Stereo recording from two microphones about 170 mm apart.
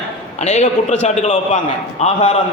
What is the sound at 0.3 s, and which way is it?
A man's voice, 40° left (ahead or behind).